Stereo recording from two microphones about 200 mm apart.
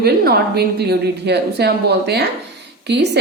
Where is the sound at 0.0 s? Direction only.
55° right (ahead or behind).